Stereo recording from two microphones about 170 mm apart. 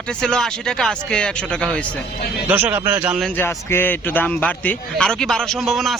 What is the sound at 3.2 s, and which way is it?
A man's voice, 10° left (ahead or behind).